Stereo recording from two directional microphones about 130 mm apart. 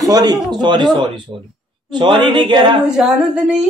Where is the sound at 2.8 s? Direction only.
5° right (ahead or behind).